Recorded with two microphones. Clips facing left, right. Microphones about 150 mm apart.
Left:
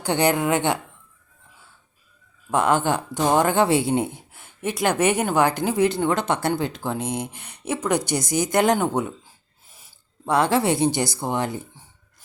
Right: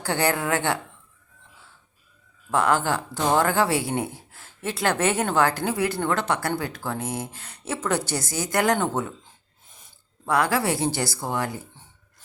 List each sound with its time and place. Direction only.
0.0 s speech: 20° left (ahead or behind)
2.5 s speech: 20° left (ahead or behind)
10.2 s speech: 25° left (ahead or behind)